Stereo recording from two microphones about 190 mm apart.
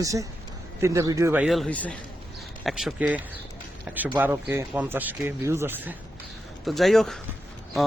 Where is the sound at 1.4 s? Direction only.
Centre (ahead or behind).